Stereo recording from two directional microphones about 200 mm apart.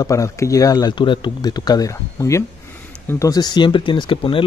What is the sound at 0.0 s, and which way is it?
Speech, 15° left (ahead or behind).